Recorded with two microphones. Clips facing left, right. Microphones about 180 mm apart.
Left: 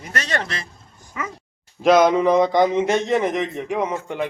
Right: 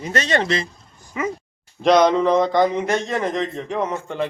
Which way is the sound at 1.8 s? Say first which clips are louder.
Even; 5° left (ahead or behind).